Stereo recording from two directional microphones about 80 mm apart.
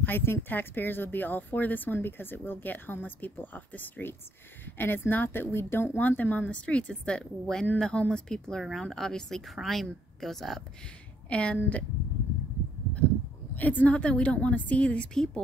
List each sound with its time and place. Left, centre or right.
0.0 s a woman's voice: left; by 10.6 s centre
11.2 s a woman's voice: centre
13.6 s a woman's voice: left